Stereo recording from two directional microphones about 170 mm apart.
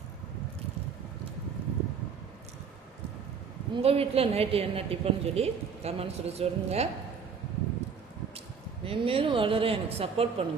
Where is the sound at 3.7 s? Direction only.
35° right (ahead or behind).